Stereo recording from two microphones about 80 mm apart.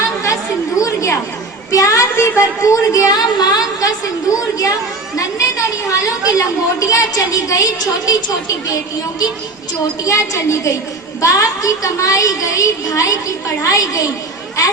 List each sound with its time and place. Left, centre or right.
0.8 s chatter: left
1.7 s a woman's voice: left
3.2 s a woman's voice: left
10.0 s a woman's voice: left